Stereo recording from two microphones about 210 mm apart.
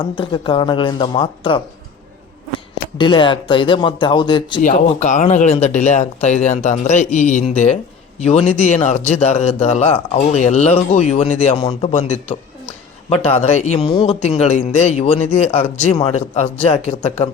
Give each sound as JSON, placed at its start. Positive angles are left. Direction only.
{"t": 0.0, "sound": "speech", "side_deg": 25}
{"t": 3.0, "sound": "speech", "side_deg": 25}
{"t": 4.7, "sound": "speech", "side_deg": 35}
{"t": 13.2, "sound": "speech", "side_deg": 30}